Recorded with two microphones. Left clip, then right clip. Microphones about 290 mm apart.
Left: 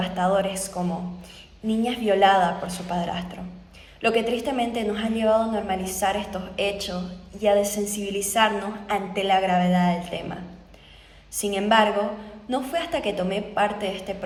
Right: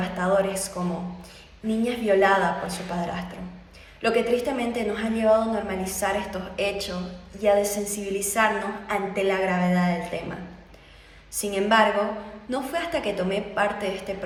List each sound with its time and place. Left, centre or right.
0.0 s a woman's voice: centre
11.3 s a woman's voice: centre